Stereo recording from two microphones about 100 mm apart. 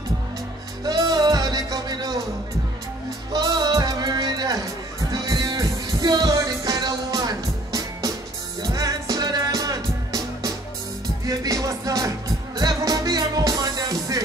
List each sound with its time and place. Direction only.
0.8 s music: 40° right (ahead or behind)
3.3 s music: 40° right (ahead or behind)